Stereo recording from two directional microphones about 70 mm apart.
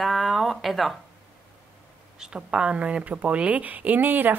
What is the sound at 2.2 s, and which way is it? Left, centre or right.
Speech, centre.